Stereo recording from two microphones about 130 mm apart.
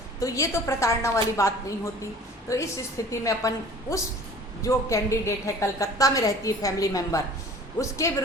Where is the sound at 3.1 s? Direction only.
25° left (ahead or behind).